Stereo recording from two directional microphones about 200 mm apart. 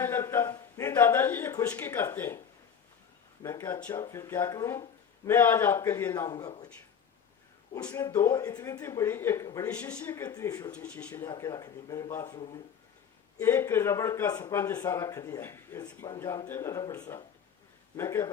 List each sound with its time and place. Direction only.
0.0 s a sound: 10° left (ahead or behind)
3.4 s speech: 10° left (ahead or behind)
7.9 s speech: 15° left (ahead or behind)
10.7 s speech: 5° left (ahead or behind)